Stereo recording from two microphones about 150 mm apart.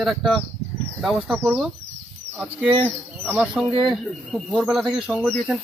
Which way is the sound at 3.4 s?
Centre (ahead or behind).